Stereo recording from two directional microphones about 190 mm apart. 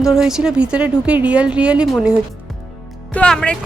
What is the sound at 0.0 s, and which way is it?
Speech, centre (ahead or behind).